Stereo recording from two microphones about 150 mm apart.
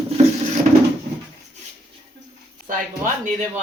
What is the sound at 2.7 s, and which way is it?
Speech, 60° right (ahead or behind).